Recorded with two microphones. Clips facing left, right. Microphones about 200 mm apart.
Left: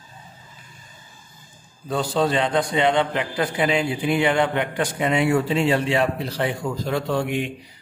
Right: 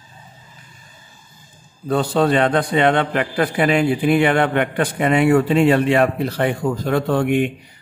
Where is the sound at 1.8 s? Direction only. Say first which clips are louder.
Right 4 dB; 55° right (ahead or behind).